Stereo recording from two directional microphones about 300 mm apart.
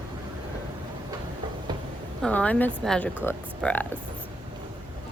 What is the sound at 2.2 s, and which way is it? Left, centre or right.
Speech, centre.